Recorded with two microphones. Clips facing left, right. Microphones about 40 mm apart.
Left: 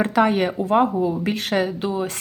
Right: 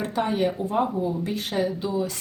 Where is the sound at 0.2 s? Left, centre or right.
Left.